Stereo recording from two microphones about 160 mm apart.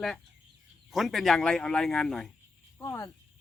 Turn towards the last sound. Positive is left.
turn(degrees=15)  # may be behind; listen again after turning